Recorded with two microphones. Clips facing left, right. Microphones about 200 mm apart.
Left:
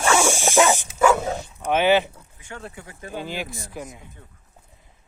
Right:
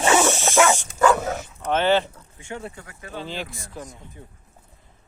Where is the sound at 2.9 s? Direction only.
25° left (ahead or behind).